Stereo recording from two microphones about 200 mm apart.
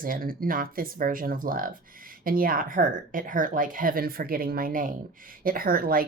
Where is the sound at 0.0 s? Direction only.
45° right (ahead or behind).